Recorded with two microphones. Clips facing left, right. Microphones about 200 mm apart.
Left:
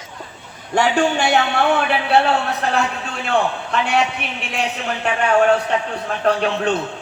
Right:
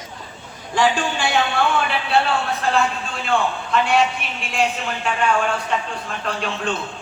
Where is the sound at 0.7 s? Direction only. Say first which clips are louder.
Left 3 dB; 60° left (ahead or behind).